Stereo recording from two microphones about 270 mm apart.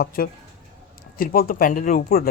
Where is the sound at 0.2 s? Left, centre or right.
Left.